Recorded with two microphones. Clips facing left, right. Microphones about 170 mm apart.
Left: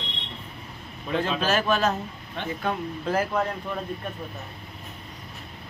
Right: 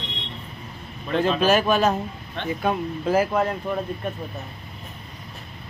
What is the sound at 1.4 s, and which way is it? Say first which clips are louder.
Speech: right 5 dB; 15° right (ahead or behind).